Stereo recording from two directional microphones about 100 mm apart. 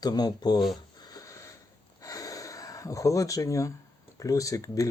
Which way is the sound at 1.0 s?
35° left (ahead or behind).